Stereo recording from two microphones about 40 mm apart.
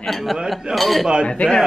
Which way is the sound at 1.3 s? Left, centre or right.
Left.